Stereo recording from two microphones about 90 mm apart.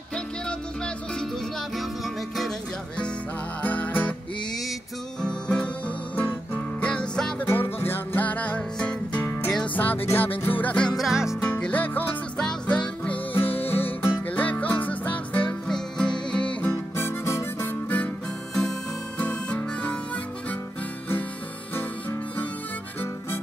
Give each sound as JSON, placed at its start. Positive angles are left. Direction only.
{"t": 0.1, "sound": "music", "side_deg": 10}
{"t": 3.6, "sound": "music", "side_deg": 15}
{"t": 5.2, "sound": "music", "side_deg": 10}
{"t": 7.8, "sound": "music", "side_deg": 25}
{"t": 9.2, "sound": "music", "side_deg": 25}
{"t": 11.0, "sound": "music", "side_deg": -5}
{"t": 11.6, "sound": "music", "side_deg": 20}
{"t": 12.4, "sound": "music", "side_deg": 10}
{"t": 16.9, "sound": "harmonica", "side_deg": 30}
{"t": 21.7, "sound": "harmonica", "side_deg": 20}